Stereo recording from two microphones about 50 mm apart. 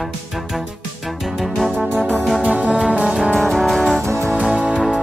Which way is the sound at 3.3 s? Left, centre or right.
Centre.